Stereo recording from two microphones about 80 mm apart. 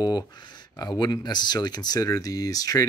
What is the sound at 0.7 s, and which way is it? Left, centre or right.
Speech, left.